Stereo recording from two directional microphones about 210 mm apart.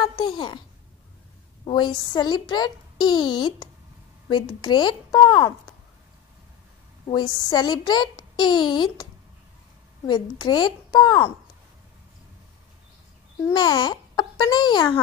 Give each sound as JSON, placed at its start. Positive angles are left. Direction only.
{"t": 0.1, "sound": "a child's voice", "side_deg": 20}
{"t": 1.6, "sound": "speech", "side_deg": 20}
{"t": 7.1, "sound": "speech", "side_deg": 20}
{"t": 10.0, "sound": "speech", "side_deg": 20}
{"t": 13.5, "sound": "a child's voice", "side_deg": 20}